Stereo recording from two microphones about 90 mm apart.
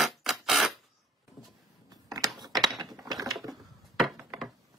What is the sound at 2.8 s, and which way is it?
Typing, 45° right (ahead or behind).